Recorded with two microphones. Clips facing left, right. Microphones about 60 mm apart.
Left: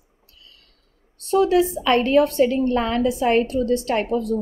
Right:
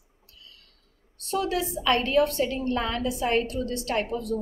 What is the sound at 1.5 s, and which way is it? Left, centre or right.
A woman's voice, left.